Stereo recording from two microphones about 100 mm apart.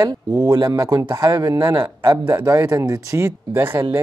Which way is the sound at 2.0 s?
25° right (ahead or behind).